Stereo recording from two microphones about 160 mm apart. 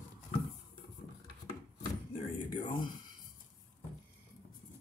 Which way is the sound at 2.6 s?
30° left (ahead or behind).